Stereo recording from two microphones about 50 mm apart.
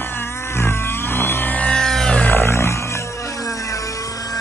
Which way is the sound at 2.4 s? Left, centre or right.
Left.